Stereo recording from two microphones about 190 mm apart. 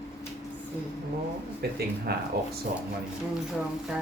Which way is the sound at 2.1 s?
55° right (ahead or behind).